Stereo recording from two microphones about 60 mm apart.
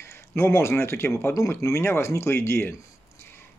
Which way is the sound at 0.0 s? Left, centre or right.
Left.